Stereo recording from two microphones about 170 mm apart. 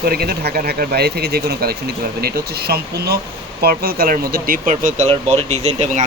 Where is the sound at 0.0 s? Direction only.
65° right (ahead or behind).